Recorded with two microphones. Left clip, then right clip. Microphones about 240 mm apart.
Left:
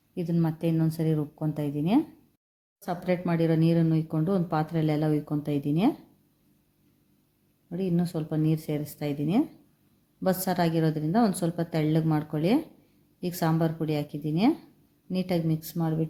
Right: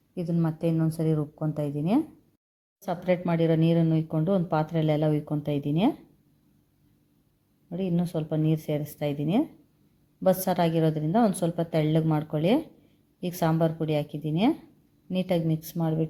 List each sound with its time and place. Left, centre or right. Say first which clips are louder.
0.1 s speech: even; centre
7.7 s speech: even; centre